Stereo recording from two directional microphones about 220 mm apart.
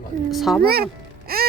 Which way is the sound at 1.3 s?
45° right (ahead or behind).